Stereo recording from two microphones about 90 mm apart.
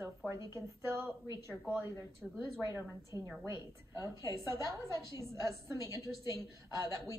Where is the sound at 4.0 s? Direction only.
40° left (ahead or behind).